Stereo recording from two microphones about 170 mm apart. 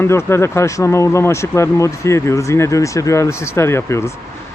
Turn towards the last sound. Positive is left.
turn(degrees=15)  # may be behind; listen again after turning